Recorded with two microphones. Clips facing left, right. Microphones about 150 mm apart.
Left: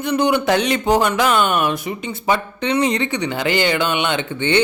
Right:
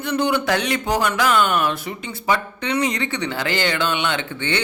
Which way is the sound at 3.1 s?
15° left (ahead or behind).